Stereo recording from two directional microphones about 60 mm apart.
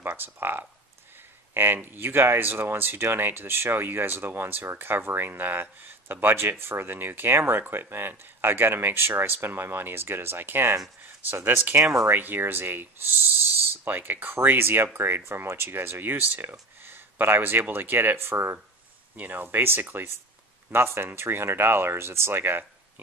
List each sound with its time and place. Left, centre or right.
0.0 s speech: right
11.8 s speech: right
12.1 s speech: right